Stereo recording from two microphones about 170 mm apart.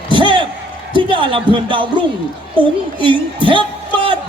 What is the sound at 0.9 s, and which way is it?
Speech, 30° right (ahead or behind).